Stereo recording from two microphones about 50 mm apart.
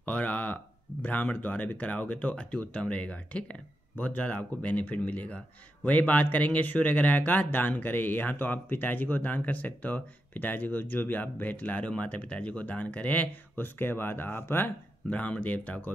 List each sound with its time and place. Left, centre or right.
0.0 s speech: left
15.0 s speech: left